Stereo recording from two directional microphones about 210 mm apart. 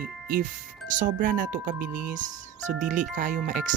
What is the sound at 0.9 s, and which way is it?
Speech, 40° right (ahead or behind).